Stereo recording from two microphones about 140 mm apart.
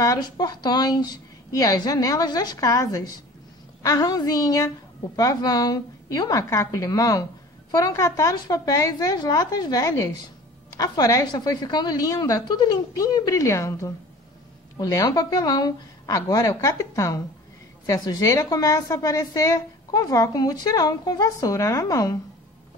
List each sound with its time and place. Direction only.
0.0 s a woman's voice: 25° left (ahead or behind)